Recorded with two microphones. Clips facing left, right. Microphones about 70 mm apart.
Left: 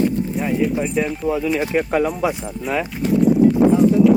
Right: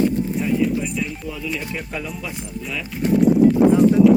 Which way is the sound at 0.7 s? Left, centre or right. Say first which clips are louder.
Left 4 dB; left.